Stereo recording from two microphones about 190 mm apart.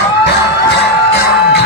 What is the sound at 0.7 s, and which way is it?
Music, 60° left (ahead or behind).